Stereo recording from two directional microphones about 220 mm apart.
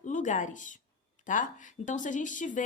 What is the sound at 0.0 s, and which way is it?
Speech, 35° left (ahead or behind).